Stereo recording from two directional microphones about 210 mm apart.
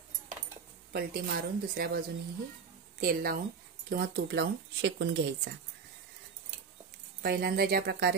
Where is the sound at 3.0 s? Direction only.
45° right (ahead or behind).